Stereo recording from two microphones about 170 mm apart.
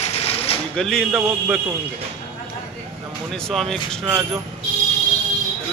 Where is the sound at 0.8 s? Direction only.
5° left (ahead or behind).